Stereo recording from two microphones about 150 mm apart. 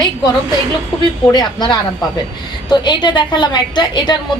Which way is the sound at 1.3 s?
30° left (ahead or behind).